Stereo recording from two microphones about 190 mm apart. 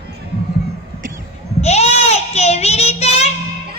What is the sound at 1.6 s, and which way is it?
Goat, 35° left (ahead or behind).